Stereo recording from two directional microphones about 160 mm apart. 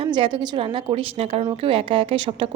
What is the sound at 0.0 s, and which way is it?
A woman's voice, 30° right (ahead or behind).